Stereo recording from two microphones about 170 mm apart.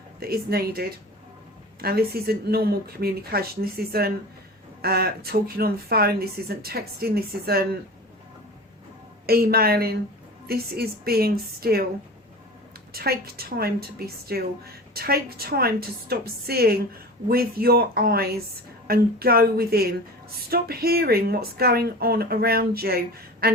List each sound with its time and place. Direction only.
0.2 s a woman's voice: 65° right (ahead or behind)
9.2 s a woman's voice: 65° right (ahead or behind)
12.9 s a woman's voice: 65° right (ahead or behind)
23.4 s a sound: 65° right (ahead or behind)